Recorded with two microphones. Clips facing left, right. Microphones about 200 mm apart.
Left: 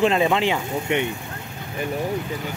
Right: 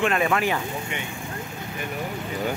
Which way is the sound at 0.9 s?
65° left (ahead or behind).